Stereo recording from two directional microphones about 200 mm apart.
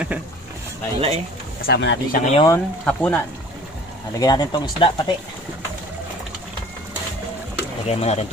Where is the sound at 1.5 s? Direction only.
55° left (ahead or behind).